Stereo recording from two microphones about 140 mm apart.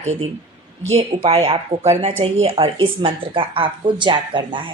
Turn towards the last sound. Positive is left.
turn(degrees=-35)  # may be behind; listen again after turning